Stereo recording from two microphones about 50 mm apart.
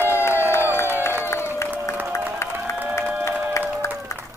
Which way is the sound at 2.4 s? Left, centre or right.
Left.